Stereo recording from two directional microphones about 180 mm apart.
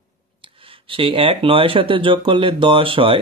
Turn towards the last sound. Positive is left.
turn(degrees=-30)  # may be behind; listen again after turning